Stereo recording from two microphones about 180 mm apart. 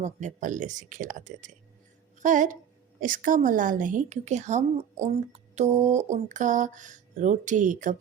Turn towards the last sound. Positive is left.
turn(degrees=-45)  # may be behind; listen again after turning